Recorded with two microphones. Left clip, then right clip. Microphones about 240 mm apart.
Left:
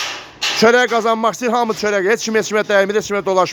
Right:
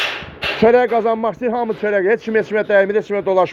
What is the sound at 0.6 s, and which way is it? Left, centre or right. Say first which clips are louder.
A man's voice: even; centre.